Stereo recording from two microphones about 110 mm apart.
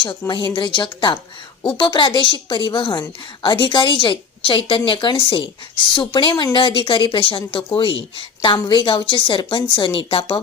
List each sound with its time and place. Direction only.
0.0 s a woman's voice: 45° left (ahead or behind)